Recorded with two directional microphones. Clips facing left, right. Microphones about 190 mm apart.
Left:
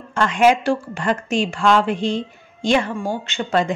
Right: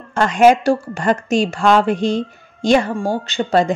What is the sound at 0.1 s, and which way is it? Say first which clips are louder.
A woman's voice: right 4 dB; 40° right (ahead or behind).